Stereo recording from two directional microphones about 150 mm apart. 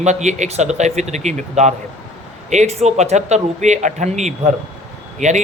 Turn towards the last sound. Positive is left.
turn(degrees=-50)  # may be behind; listen again after turning